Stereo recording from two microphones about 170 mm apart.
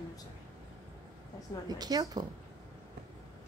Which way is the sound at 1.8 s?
25° right (ahead or behind).